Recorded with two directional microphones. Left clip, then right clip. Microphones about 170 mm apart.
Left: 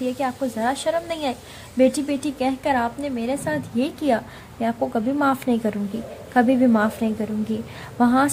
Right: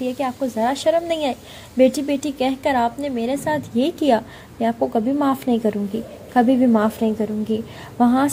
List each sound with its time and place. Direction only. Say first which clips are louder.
0.0 s a woman's voice: right 1 dB; 20° right (ahead or behind)